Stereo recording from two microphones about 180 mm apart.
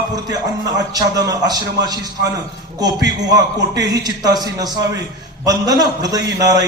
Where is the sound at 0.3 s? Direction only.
20° right (ahead or behind).